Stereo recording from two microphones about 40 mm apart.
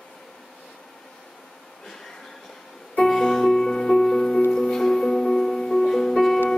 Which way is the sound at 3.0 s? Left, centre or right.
Centre.